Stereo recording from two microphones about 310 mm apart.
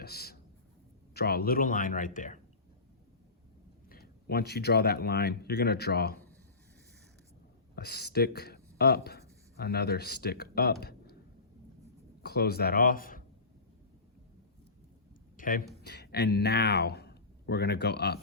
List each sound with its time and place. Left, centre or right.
0.0 s a sound: left
1.1 s speech: left
3.8 s speech: left
7.8 s speech: left
12.2 s speech: left
15.4 s speech: left